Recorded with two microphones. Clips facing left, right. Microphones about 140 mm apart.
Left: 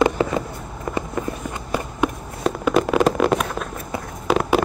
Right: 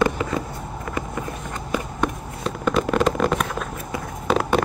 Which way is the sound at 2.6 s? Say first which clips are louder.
Left 2 dB; 5° left (ahead or behind).